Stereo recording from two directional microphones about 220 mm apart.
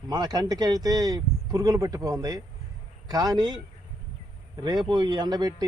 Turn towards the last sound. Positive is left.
turn(degrees=-20)  # may be behind; listen again after turning